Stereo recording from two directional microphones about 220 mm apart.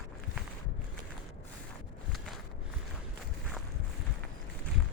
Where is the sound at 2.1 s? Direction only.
Centre (ahead or behind).